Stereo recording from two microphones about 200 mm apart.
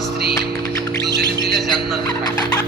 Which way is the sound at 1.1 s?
55° right (ahead or behind).